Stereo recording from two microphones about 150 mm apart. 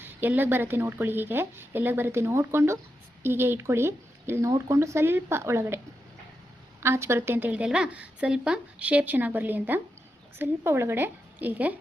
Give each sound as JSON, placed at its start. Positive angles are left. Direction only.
{"t": 0.0, "sound": "speech", "side_deg": -15}
{"t": 6.8, "sound": "speech", "side_deg": -15}